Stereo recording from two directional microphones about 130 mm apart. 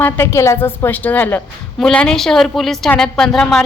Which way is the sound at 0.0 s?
20° left (ahead or behind).